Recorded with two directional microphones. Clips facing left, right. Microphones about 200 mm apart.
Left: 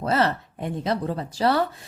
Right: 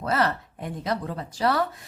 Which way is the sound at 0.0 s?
25° left (ahead or behind).